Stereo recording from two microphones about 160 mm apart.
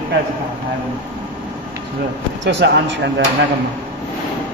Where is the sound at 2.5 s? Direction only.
90° right.